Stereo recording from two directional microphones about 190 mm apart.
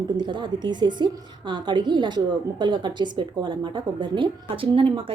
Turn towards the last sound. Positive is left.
turn(degrees=-30)  # may be behind; listen again after turning